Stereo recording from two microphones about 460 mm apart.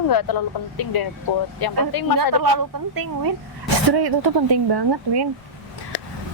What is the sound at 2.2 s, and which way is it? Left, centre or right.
Speech, right.